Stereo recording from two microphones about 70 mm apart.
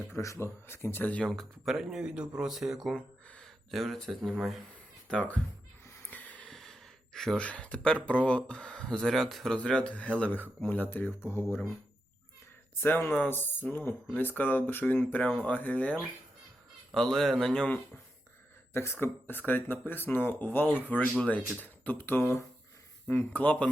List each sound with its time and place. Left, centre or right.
0.2 s a man's voice: left
0.4 s speech: left
1.2 s speech: centre
1.6 s a man's voice: centre
5.0 s speech: centre
6.1 s a sound: left
6.5 s gasp: centre
7.4 s speech: centre
9.6 s speech: centre; by 11.6 s left
13.1 s speech: left
16.9 s a man's voice: centre
18.7 s speech: left
23.0 s speech: left